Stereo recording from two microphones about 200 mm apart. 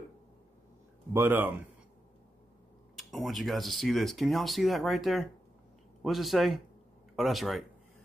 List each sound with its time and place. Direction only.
1.1 s speech: 10° right (ahead or behind)
3.0 s speech: centre (ahead or behind)